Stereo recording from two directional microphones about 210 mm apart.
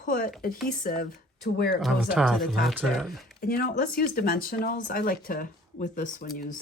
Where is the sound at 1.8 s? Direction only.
Centre (ahead or behind).